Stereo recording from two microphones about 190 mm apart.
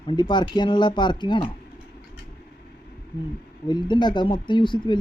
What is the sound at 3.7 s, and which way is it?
Speech, 25° left (ahead or behind).